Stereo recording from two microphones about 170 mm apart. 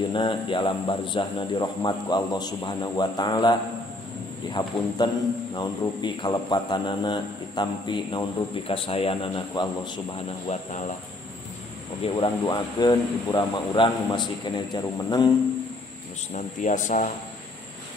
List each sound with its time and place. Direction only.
0.1 s a man's voice: 30° left (ahead or behind)
12.0 s a man's voice: 30° left (ahead or behind)
16.3 s a man's voice: 45° left (ahead or behind)